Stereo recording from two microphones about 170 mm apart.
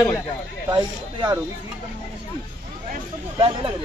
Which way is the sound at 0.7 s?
25° right (ahead or behind).